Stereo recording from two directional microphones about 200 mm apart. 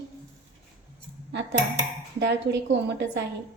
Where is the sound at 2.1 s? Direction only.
60° right (ahead or behind).